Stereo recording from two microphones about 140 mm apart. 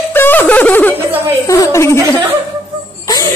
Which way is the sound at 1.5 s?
20° left (ahead or behind).